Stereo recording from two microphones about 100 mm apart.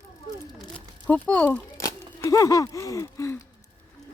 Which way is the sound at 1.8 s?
35° left (ahead or behind).